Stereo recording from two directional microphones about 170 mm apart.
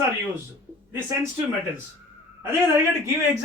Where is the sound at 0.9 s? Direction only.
15° right (ahead or behind).